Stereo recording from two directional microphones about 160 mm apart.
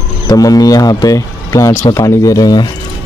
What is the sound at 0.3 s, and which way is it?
Speech, 25° left (ahead or behind).